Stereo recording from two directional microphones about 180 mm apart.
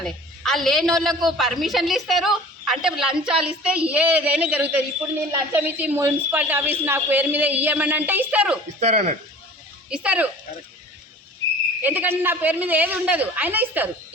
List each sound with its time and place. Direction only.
0.0 s a woman's voice: centre (ahead or behind)
8.8 s speech: 40° right (ahead or behind)
9.9 s speech: 5° right (ahead or behind)
11.8 s speech: 10° right (ahead or behind)